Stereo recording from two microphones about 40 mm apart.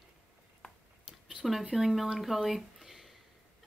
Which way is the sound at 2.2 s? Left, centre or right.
Centre.